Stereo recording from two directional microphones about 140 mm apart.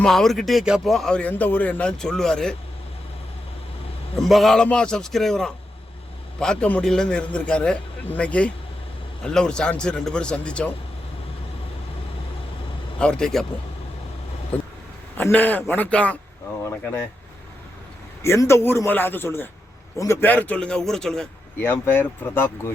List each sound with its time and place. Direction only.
0.0 s a man's voice: 5° left (ahead or behind)
4.2 s a man's voice: centre (ahead or behind)
13.0 s a man's voice: 5° left (ahead or behind)
14.5 s a sound: 10° left (ahead or behind)
15.2 s speech: 10° left (ahead or behind)
18.2 s speech: 20° left (ahead or behind)
21.6 s speech: 15° left (ahead or behind)